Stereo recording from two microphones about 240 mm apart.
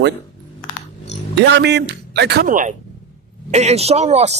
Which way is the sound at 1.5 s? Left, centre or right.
Right.